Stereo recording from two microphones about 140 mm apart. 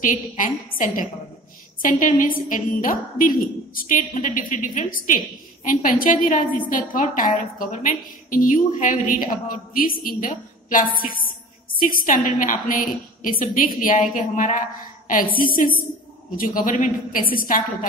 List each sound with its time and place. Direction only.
0.0 s a woman's voice: 70° left (ahead or behind)
15.0 s a woman's voice: 85° left